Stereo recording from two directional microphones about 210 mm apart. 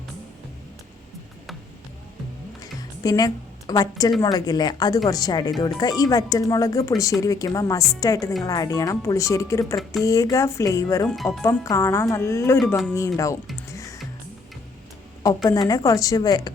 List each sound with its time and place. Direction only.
2.6 s music: 20° left (ahead or behind)
4.2 s speech: 20° left (ahead or behind)
12.6 s speech: centre (ahead or behind)
13.0 s speech: 15° left (ahead or behind)
13.7 s music: 15° left (ahead or behind)
15.4 s speech: 20° left (ahead or behind)